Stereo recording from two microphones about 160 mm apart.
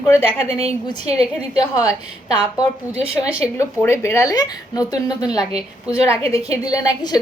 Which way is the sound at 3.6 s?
15° left (ahead or behind).